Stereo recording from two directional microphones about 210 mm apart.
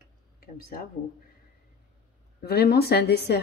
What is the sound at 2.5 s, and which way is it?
Speech, 50° left (ahead or behind).